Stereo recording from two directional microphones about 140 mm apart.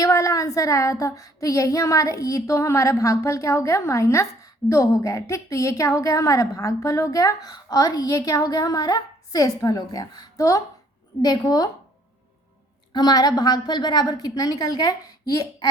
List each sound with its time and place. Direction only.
0.0 s a woman's voice: 25° left (ahead or behind)
12.9 s a woman's voice: 30° left (ahead or behind)